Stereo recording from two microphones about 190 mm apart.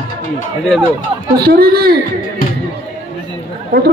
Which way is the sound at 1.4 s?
55° right (ahead or behind).